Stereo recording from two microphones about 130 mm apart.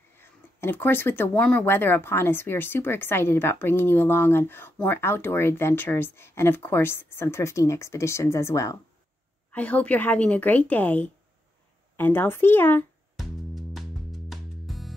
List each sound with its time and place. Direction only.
0.2 s speech: 15° left (ahead or behind)
9.5 s speech: 10° left (ahead or behind)
13.1 s music: centre (ahead or behind)